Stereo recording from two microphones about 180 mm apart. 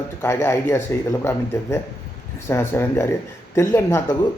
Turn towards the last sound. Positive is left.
turn(degrees=15)  # may be behind; listen again after turning